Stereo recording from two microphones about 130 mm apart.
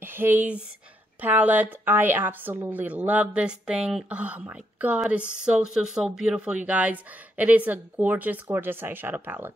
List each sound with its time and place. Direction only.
0.0 s speech: 15° right (ahead or behind)